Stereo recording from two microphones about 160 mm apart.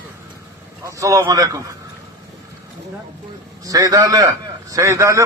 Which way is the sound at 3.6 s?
20° right (ahead or behind).